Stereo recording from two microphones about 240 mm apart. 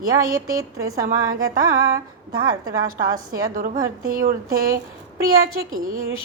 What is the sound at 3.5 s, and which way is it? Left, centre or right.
A woman's voice, right.